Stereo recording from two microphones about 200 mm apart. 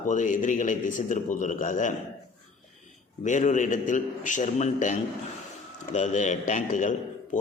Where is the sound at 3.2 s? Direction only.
35° left (ahead or behind).